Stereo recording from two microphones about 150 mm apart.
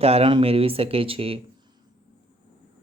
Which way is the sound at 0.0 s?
40° right (ahead or behind).